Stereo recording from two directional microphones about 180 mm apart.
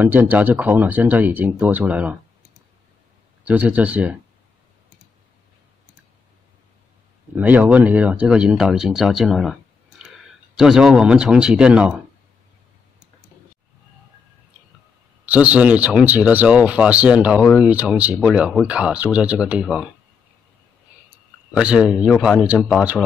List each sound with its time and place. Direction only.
0.0 s speech: 10° right (ahead or behind)
3.4 s speech: 10° right (ahead or behind)
7.3 s speech: 10° right (ahead or behind)
15.2 s speech: 5° right (ahead or behind)
21.5 s speech: 5° right (ahead or behind)